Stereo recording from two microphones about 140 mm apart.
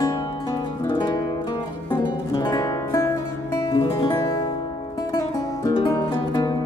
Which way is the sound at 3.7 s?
35° left (ahead or behind).